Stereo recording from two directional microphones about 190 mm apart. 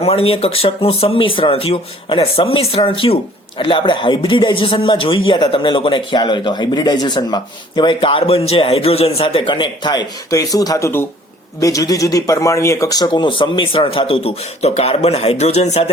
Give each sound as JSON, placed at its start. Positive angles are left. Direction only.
{"t": 0.0, "sound": "speech", "side_deg": 30}